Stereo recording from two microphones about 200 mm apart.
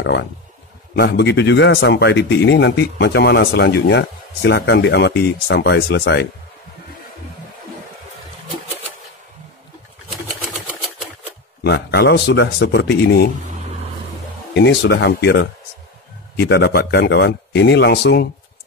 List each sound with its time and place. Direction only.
0.0 s speech: 60° left (ahead or behind)
10.5 s typewriter: centre (ahead or behind)
11.6 s speech: 55° left (ahead or behind)
14.5 s speech: 60° left (ahead or behind)